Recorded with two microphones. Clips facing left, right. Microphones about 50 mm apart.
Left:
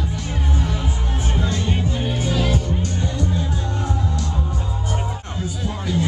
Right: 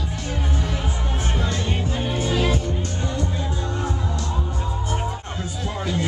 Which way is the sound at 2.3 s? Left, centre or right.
Right.